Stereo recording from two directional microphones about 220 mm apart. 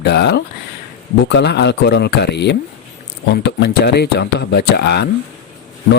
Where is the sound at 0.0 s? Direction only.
50° left (ahead or behind).